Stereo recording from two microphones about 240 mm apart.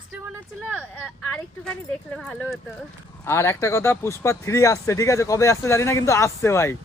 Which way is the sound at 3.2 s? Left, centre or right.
Centre.